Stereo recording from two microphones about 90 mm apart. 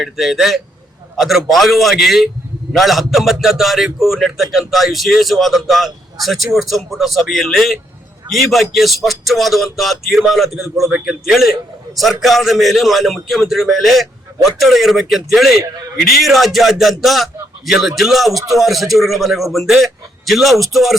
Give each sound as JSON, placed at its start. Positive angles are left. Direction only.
{"t": 0.0, "sound": "speech", "side_deg": 0}